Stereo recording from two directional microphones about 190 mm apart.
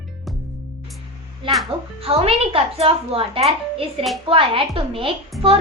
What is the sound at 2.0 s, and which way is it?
A woman's voice, 30° right (ahead or behind).